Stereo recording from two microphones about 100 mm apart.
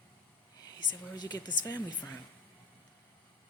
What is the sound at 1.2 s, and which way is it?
Speech, 45° left (ahead or behind).